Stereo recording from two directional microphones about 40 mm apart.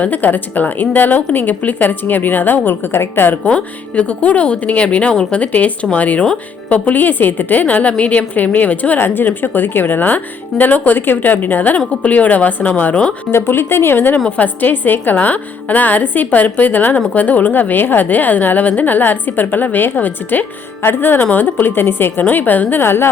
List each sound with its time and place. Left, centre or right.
0.0 s a woman's voice: left
3.4 s speech: left
6.9 s a woman's voice: left
9.0 s a woman's voice: left
13.3 s speech: left
14.3 s a woman's voice: left
20.8 s a woman's voice: left
22.2 s a woman's voice: left
22.8 s speech: left